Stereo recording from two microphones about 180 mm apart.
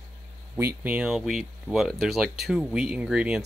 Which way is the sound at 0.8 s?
5° right (ahead or behind).